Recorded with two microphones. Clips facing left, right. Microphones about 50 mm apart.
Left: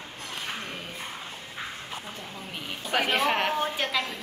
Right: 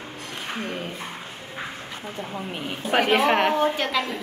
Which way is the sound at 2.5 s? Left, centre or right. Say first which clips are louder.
Right 5 dB; centre.